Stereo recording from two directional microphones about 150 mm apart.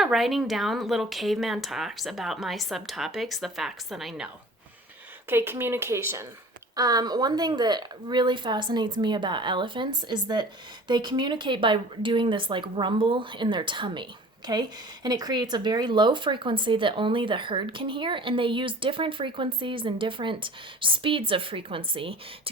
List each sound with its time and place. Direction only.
0.0 s speech: centre (ahead or behind)
5.3 s a woman's voice: 15° right (ahead or behind); by 22.1 s 35° right (ahead or behind)